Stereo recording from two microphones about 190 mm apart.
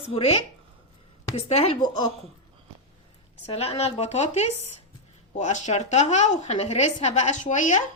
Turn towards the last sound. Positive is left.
turn(degrees=40)  # may be behind; listen again after turning